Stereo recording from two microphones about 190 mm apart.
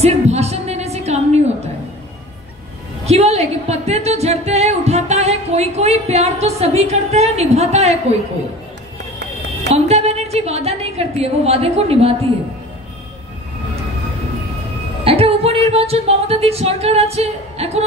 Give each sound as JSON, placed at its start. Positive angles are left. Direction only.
{"t": 0.0, "sound": "a sound", "side_deg": -35}
{"t": 3.1, "sound": "music", "side_deg": -35}
{"t": 9.7, "sound": "a woman's voice", "side_deg": -35}
{"t": 15.0, "sound": "music", "side_deg": -30}